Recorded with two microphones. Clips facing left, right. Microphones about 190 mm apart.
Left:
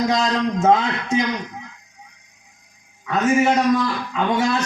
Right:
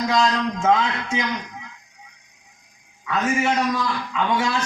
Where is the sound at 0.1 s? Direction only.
40° left (ahead or behind).